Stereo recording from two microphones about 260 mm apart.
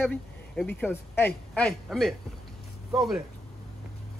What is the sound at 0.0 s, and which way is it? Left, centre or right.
Speech, centre.